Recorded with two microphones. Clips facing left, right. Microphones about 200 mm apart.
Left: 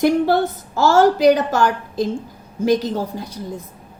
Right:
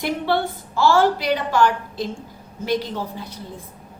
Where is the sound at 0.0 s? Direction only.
45° left (ahead or behind).